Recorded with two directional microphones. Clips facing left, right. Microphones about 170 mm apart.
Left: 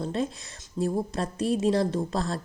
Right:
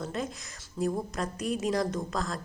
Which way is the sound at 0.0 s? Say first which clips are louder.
Left 5 dB; 30° left (ahead or behind).